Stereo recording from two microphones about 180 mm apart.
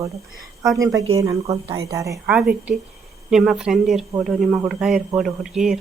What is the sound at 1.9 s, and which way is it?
Speech, 15° right (ahead or behind).